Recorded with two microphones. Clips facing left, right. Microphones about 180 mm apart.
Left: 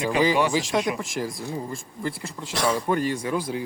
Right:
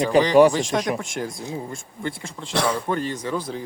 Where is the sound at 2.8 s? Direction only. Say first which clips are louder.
Left 1 dB; 10° left (ahead or behind).